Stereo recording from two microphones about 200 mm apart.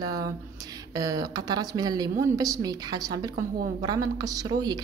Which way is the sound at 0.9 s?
20° right (ahead or behind).